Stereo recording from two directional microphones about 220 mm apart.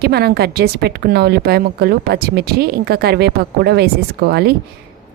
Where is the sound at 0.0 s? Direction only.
45° right (ahead or behind).